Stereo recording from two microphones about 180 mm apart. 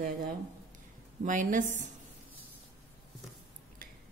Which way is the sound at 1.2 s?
45° right (ahead or behind).